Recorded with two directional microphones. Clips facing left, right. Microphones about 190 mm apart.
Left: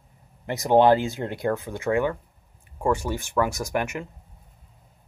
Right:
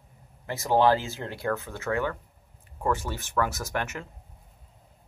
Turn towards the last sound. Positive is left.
turn(degrees=15)  # may be behind; listen again after turning